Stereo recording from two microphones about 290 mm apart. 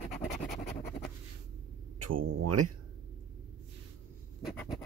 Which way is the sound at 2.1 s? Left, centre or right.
Right.